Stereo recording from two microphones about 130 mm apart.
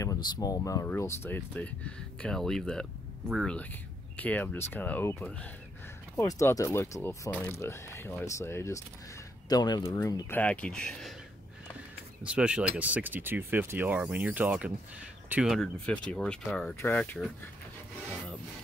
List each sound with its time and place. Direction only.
0.0 s speech: 30° left (ahead or behind); by 3.5 s centre (ahead or behind)
4.2 s speech: 10° left (ahead or behind)
6.1 s speech: 25° left (ahead or behind)
9.5 s speech: 30° left (ahead or behind)
10.3 s speech: 10° left (ahead or behind)
12.2 s speech: 10° right (ahead or behind)
15.8 s speech: 10° left (ahead or behind)